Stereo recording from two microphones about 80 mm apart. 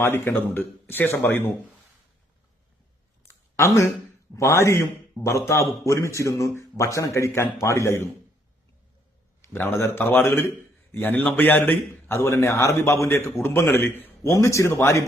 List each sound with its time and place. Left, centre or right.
0.0 s a man's voice: left
3.2 s a sound: left
4.4 s a man's voice: left
9.4 s a man's voice: left
14.3 s a man's voice: left